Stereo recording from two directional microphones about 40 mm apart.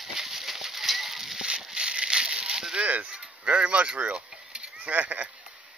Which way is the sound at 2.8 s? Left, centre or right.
Right.